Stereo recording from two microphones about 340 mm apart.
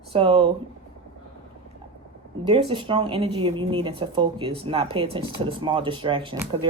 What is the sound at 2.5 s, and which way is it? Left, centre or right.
Speech, centre.